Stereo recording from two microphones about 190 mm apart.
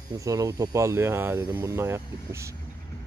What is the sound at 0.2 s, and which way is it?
Speech, 15° right (ahead or behind).